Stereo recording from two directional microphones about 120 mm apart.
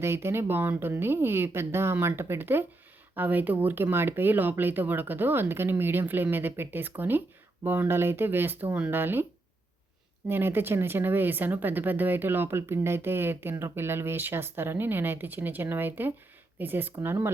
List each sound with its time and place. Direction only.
0.0 s speech: 20° right (ahead or behind)
10.2 s speech: 20° right (ahead or behind)